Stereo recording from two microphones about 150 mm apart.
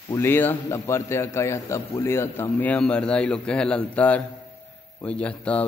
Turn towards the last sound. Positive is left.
turn(degrees=10)  # may be behind; listen again after turning